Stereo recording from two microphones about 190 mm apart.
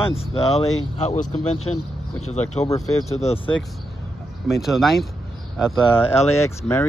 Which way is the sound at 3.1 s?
35° left (ahead or behind).